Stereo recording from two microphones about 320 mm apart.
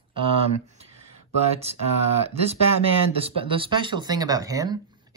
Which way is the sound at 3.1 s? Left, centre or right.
Centre.